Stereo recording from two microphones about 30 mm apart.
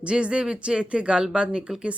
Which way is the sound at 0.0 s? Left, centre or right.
Right.